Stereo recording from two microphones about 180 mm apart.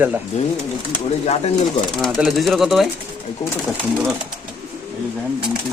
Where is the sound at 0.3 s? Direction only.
40° left (ahead or behind).